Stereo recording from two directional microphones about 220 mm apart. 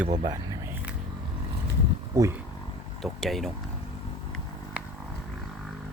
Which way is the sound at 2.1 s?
15° right (ahead or behind).